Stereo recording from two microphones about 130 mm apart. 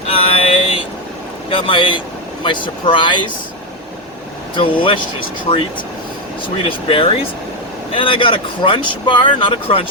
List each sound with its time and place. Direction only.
0.1 s vehicle: 45° left (ahead or behind)
1.5 s speech: 40° left (ahead or behind)
4.5 s speech: 40° left (ahead or behind)
6.7 s speech: 45° left (ahead or behind)